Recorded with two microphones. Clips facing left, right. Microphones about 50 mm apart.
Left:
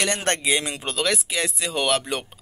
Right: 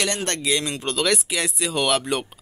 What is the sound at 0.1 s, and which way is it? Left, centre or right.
Speech, left.